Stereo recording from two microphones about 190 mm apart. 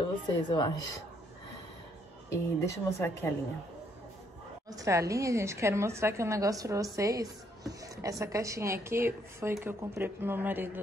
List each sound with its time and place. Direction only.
0.5 s speech: 20° left (ahead or behind)
2.2 s speech: 15° left (ahead or behind)
4.6 s a woman's voice: 15° right (ahead or behind)